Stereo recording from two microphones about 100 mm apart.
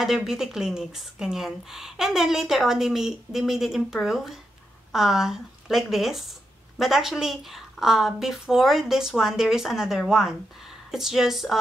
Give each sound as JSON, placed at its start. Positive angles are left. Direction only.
{"t": 0.0, "sound": "a woman's voice", "side_deg": -5}